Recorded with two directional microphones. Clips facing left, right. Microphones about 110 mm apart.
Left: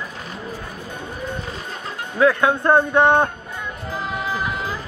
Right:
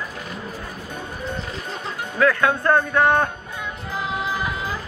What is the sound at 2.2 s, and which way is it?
A man's voice, 20° left (ahead or behind).